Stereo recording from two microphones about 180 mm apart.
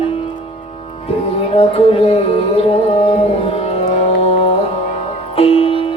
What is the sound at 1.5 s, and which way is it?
Music, 30° left (ahead or behind).